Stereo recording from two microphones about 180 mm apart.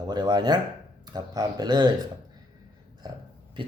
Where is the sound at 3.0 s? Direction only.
25° right (ahead or behind).